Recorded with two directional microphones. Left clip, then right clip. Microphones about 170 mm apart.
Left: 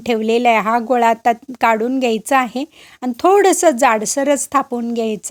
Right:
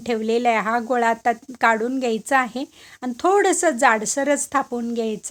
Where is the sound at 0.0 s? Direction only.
35° left (ahead or behind).